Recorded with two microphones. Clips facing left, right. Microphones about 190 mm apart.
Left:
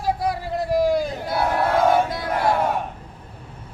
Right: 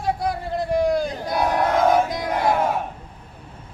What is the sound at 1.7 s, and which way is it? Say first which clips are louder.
Battle cry: even; 5° left (ahead or behind).